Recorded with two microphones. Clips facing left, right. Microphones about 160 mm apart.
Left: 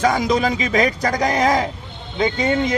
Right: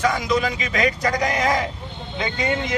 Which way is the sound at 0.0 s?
35° left (ahead or behind).